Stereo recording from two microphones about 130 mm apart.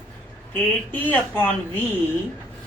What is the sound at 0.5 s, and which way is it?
Speech, 15° left (ahead or behind).